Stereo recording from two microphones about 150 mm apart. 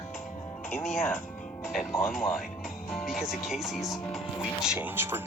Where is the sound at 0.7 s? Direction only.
15° left (ahead or behind).